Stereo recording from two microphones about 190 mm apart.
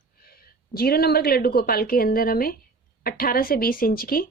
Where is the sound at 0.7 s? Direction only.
55° left (ahead or behind).